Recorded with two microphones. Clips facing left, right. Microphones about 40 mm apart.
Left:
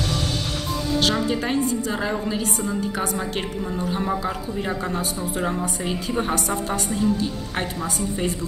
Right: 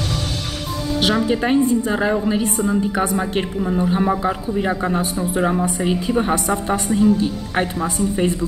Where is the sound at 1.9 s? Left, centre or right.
Centre.